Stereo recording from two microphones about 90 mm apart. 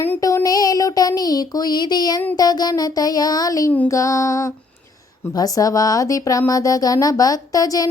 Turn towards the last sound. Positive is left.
turn(degrees=40)  # may be behind; listen again after turning